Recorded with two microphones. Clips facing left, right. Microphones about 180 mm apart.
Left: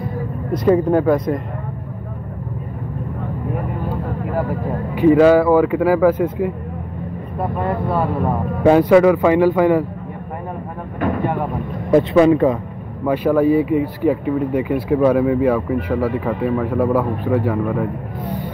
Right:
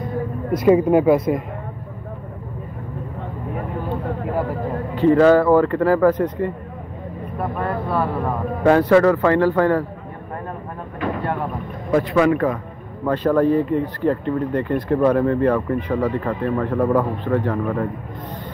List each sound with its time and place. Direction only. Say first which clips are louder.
0.7 s speech: right 1 dB; 10° right (ahead or behind)
4.9 s speech: left 2 dB; 10° left (ahead or behind)
7.3 s speech: left 3 dB; 20° left (ahead or behind)
11.9 s speech: left 4 dB; 25° left (ahead or behind)
13.0 s speech: left 2 dB; 10° left (ahead or behind)